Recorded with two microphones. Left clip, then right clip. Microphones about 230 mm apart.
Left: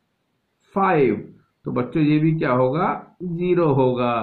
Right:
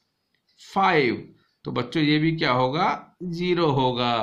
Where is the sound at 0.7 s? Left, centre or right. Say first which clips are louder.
Left 2 dB; right.